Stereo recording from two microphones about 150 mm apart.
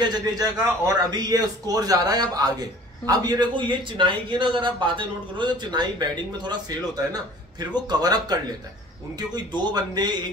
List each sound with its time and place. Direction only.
0.0 s a man's voice: 25° right (ahead or behind)
9.6 s a man's voice: 30° right (ahead or behind)